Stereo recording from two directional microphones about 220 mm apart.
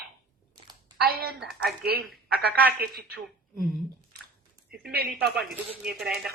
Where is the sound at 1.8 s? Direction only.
45° right (ahead or behind).